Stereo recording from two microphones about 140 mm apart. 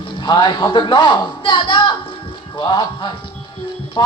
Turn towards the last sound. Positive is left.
turn(degrees=30)  # may be behind; listen again after turning